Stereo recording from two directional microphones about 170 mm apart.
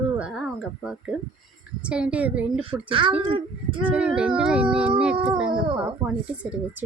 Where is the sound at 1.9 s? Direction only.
5° right (ahead or behind).